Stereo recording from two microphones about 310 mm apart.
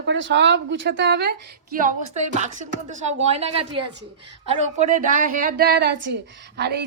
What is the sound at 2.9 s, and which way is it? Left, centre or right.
Speech, right.